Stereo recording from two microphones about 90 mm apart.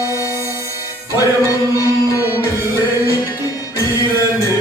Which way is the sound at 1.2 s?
35° left (ahead or behind).